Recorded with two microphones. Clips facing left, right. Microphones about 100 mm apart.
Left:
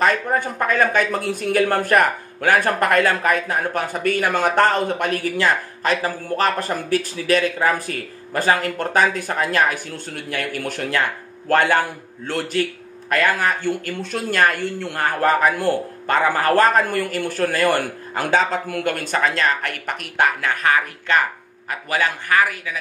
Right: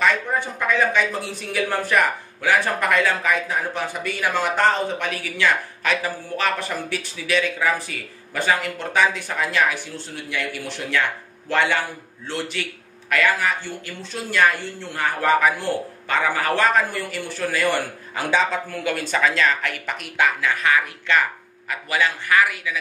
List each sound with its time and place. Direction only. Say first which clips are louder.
0.0 s a man's voice: left 2 dB; 45° left (ahead or behind)